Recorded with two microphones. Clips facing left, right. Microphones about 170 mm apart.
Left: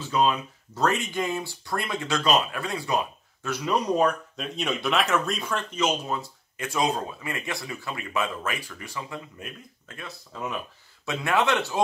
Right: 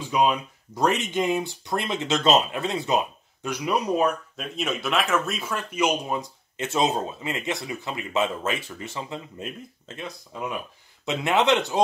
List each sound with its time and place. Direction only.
0.0 s speech: 15° right (ahead or behind)